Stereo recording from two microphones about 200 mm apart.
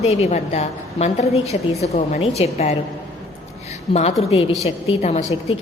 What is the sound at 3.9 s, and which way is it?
A woman's voice, 30° left (ahead or behind).